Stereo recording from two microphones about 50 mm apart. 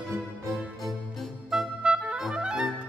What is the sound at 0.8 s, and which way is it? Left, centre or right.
Music, centre.